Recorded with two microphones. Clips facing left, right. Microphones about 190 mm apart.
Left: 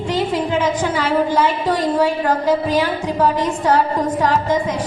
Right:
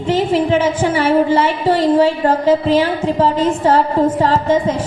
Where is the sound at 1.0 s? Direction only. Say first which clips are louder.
Right 3 dB; 25° right (ahead or behind).